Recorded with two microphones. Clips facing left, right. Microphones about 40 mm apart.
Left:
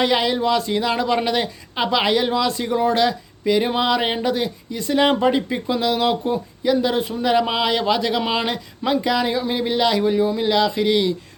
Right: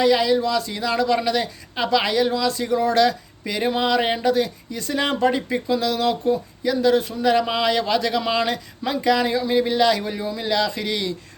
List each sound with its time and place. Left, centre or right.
0.0 s speech: left
3.0 s speech: centre
9.0 s speech: centre